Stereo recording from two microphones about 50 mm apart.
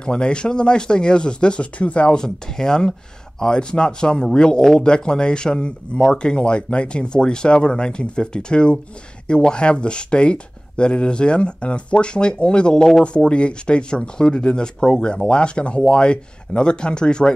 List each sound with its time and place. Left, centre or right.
0.0 s speech: centre
13.0 s speech: left